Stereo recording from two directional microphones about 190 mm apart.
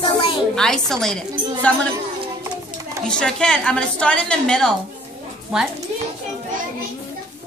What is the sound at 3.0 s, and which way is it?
A woman's voice, 5° left (ahead or behind).